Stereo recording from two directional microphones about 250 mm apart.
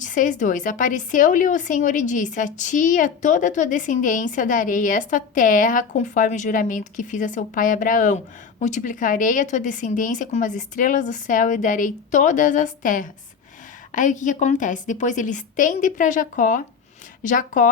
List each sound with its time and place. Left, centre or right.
0.0 s speech: left